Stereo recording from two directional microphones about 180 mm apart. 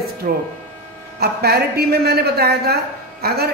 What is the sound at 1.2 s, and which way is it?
A man's voice, 60° right (ahead or behind).